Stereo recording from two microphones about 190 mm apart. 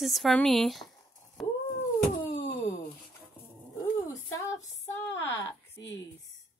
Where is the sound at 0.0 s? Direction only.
Centre (ahead or behind).